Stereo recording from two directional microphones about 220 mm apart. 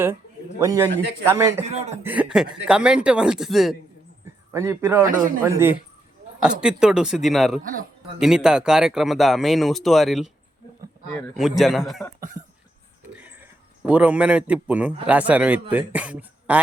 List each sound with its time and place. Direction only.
0.6 s a man's voice: 15° right (ahead or behind)
4.5 s a man's voice: 15° right (ahead or behind)
5.0 s a man's voice: 40° right (ahead or behind)
5.4 s a man's voice: 10° right (ahead or behind)
7.6 s a man's voice: 40° right (ahead or behind)
8.2 s speech: 5° right (ahead or behind)
11.3 s speech: centre (ahead or behind)
12.4 s cough: 10° right (ahead or behind)
13.1 s a sound: 10° right (ahead or behind)
15.0 s a man's voice: 5° right (ahead or behind)